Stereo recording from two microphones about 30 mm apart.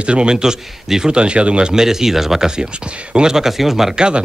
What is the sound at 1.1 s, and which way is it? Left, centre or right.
Speech, right.